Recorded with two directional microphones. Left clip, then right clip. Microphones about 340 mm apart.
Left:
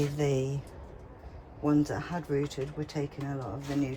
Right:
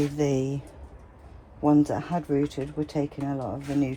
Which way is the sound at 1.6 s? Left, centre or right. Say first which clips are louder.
Right 6 dB; centre.